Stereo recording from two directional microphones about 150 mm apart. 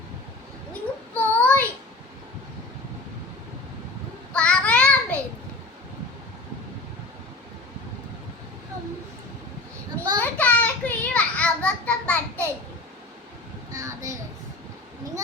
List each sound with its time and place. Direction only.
1.1 s child singing: 10° left (ahead or behind)
4.3 s child singing: 10° left (ahead or behind)
10.2 s a sound: 10° left (ahead or behind)
13.7 s child singing: 20° right (ahead or behind)